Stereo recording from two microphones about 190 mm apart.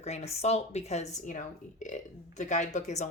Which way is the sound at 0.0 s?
35° left (ahead or behind).